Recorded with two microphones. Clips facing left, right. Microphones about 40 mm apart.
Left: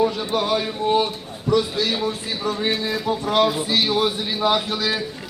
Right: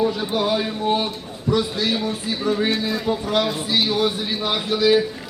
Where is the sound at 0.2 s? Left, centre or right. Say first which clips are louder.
Even; centre.